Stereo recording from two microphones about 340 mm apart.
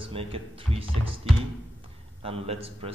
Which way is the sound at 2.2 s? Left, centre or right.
Centre.